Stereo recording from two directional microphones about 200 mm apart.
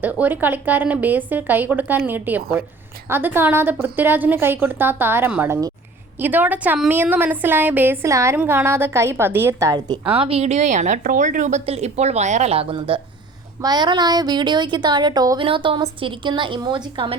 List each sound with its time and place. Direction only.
0.0 s a woman's voice: 10° right (ahead or behind); by 17.2 s 25° right (ahead or behind)